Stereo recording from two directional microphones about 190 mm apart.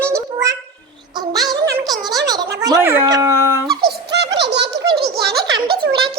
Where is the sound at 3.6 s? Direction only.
60° right (ahead or behind).